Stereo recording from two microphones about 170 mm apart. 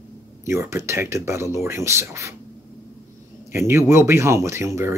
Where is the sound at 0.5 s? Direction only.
15° right (ahead or behind).